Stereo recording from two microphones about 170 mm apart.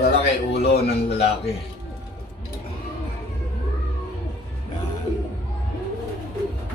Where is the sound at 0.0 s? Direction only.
75° left (ahead or behind).